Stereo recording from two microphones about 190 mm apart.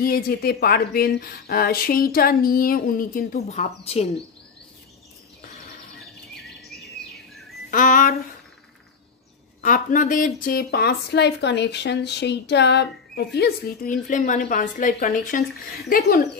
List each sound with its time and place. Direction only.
0.0 s a woman's voice: 50° left (ahead or behind); by 4.1 s 35° left (ahead or behind)
7.7 s a woman's voice: 45° left (ahead or behind)
9.6 s speech: 45° left (ahead or behind)
14.0 s a woman's voice: 40° left (ahead or behind)